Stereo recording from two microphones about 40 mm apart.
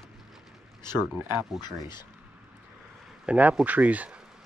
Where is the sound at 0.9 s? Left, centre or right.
Right.